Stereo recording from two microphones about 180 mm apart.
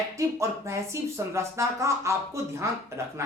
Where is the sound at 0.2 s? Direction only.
15° right (ahead or behind).